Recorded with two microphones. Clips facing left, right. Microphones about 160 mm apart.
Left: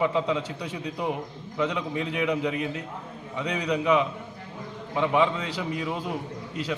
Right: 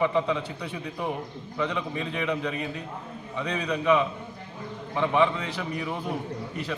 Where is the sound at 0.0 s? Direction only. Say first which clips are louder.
Even; 15° left (ahead or behind).